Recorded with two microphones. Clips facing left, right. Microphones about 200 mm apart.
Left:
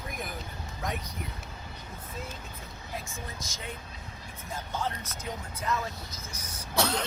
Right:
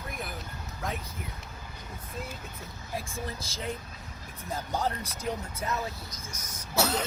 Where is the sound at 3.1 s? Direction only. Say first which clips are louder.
Right 4 dB; 30° right (ahead or behind).